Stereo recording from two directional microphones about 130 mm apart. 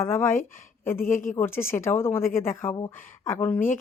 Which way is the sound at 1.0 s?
90° left.